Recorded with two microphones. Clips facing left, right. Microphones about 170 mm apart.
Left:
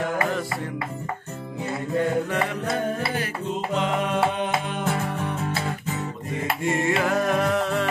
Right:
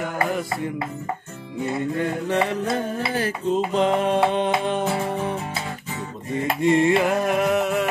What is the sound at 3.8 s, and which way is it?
Music, 30° right (ahead or behind).